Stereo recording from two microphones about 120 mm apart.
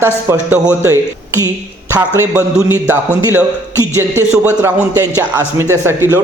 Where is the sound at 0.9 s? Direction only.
25° right (ahead or behind).